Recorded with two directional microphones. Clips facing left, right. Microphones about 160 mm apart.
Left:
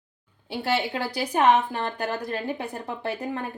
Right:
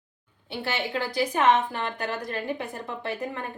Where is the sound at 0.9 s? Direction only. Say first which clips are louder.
Even; 35° left (ahead or behind).